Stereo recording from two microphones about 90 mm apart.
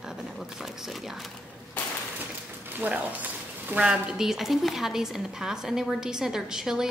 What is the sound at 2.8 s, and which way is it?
Speech, 20° right (ahead or behind).